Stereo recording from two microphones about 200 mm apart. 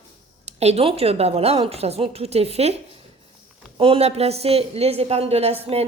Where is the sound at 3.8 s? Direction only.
30° right (ahead or behind).